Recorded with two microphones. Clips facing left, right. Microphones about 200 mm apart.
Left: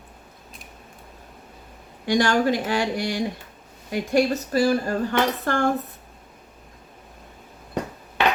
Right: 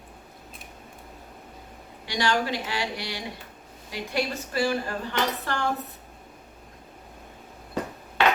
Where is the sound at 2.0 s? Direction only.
50° left (ahead or behind).